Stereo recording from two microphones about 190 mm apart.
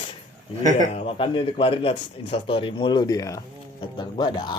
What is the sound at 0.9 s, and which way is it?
Speech, 30° left (ahead or behind).